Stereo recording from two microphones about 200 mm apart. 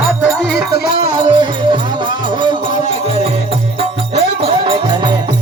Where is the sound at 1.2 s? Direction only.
20° right (ahead or behind).